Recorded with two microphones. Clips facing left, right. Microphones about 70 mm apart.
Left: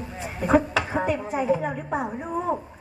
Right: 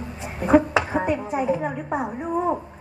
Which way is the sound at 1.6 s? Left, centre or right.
Right.